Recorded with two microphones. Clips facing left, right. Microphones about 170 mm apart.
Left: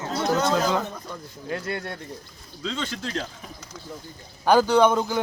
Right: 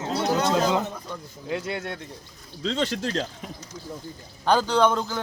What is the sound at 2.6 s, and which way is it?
Speech, 35° right (ahead or behind).